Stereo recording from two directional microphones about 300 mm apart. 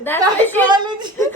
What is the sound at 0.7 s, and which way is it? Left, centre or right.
Speech, centre.